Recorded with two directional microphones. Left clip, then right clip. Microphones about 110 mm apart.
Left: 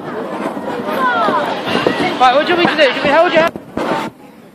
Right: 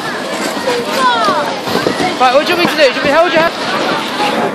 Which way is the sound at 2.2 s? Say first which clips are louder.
Even; 45° right (ahead or behind).